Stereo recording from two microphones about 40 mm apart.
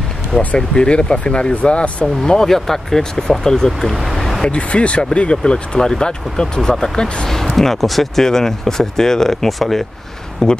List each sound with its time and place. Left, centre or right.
0.6 s speech: left
2.3 s speech: centre
3.9 s speech: centre
4.5 s speech: left; by 10.6 s centre